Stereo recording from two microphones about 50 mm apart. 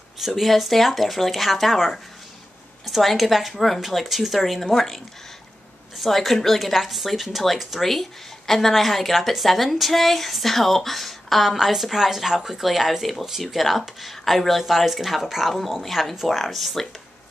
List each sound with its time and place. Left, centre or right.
0.2 s a woman's voice: centre
4.6 s a woman's voice: centre